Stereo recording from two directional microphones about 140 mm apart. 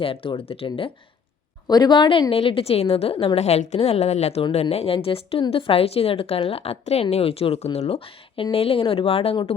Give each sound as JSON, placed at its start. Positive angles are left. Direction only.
{"t": 0.0, "sound": "speech", "side_deg": 40}
{"t": 1.6, "sound": "a woman's voice", "side_deg": 30}